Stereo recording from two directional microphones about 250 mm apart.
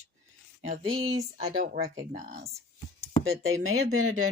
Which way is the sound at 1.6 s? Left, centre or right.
Right.